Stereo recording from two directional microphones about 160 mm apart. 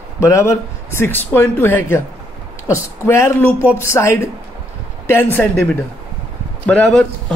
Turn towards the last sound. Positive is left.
turn(degrees=5)  # may be behind; listen again after turning